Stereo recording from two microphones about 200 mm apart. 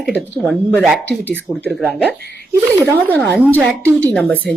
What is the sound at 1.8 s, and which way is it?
Speech, 10° right (ahead or behind).